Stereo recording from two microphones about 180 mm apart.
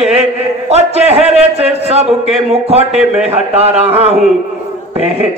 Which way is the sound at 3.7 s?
35° right (ahead or behind).